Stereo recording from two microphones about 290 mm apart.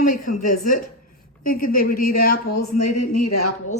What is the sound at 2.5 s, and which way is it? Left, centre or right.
A woman's voice, left.